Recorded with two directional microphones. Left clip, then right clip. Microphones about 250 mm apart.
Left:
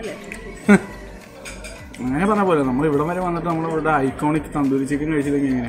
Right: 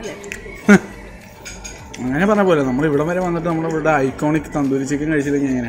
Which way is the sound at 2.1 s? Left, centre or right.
Centre.